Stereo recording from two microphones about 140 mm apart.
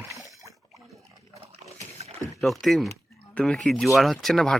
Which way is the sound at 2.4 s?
Centre (ahead or behind).